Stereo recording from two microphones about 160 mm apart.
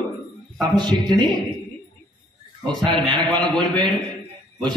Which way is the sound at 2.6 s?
30° right (ahead or behind).